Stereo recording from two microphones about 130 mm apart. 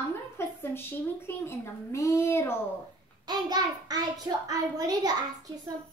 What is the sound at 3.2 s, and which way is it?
A child's voice, 30° right (ahead or behind).